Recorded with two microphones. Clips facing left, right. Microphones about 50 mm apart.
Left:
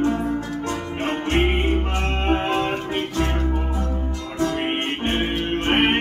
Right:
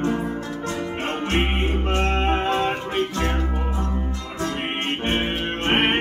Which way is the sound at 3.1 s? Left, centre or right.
Right.